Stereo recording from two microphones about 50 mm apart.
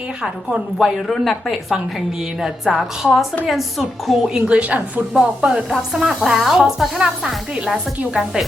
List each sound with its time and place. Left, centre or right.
0.8 s speech: centre
1.1 s a woman's voice: centre
2.7 s a woman's voice: centre
4.4 s a woman's voice: right